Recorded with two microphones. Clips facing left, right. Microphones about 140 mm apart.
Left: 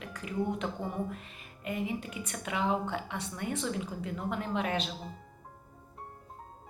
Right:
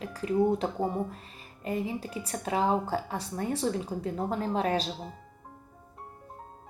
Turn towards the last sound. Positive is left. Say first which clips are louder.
# right 4 dB
turn(degrees=-35)  # may be behind; listen again after turning